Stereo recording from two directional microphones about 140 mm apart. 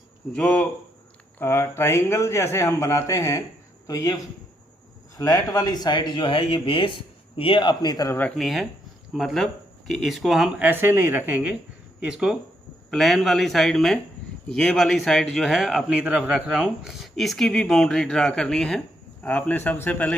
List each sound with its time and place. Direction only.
0.3 s speech: 10° left (ahead or behind)
8.4 s a man's voice: centre (ahead or behind)
10.7 s a woman's voice: 15° right (ahead or behind); by 20.1 s 10° left (ahead or behind)